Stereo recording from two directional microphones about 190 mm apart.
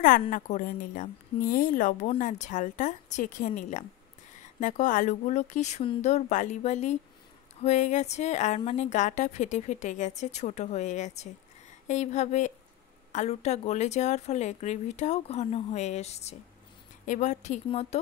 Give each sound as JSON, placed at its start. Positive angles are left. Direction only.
{"t": 0.0, "sound": "a woman's voice", "side_deg": 45}